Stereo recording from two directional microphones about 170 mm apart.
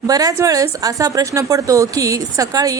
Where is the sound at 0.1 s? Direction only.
20° right (ahead or behind).